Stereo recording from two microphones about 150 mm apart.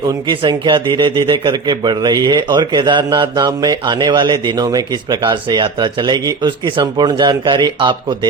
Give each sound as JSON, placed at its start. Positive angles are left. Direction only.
{"t": 0.3, "sound": "speech", "side_deg": -30}